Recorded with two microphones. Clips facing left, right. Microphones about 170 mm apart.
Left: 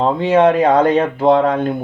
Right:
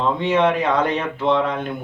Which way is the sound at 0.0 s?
35° left (ahead or behind).